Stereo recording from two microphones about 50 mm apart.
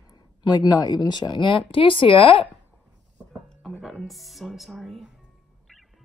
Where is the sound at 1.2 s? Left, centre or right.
Left.